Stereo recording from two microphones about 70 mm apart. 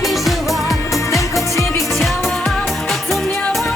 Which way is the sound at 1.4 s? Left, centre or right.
Left.